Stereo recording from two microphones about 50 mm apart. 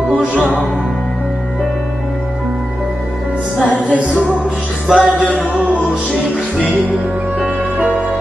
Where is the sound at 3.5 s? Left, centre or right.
Left.